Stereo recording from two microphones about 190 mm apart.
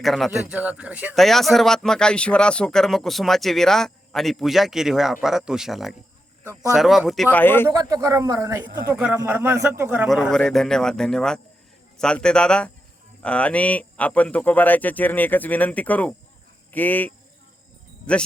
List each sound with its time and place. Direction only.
0.0 s speech: centre (ahead or behind)
7.3 s speech: 10° left (ahead or behind)
7.7 s speech: 20° right (ahead or behind)
10.1 s speech: centre (ahead or behind)